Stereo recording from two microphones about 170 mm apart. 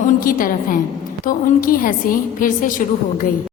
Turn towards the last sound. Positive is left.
turn(degrees=50)  # may be behind; listen again after turning